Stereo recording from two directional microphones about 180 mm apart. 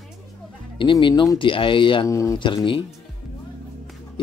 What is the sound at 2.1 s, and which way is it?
Speech, 15° left (ahead or behind).